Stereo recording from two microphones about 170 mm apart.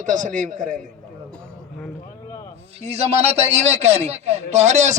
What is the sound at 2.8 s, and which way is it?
A man's voice, 40° right (ahead or behind).